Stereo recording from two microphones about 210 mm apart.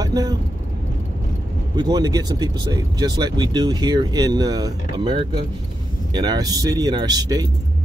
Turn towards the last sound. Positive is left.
turn(degrees=-20)  # may be behind; listen again after turning